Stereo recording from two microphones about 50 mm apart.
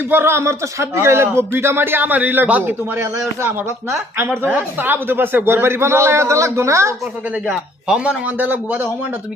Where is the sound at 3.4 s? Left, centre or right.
Right.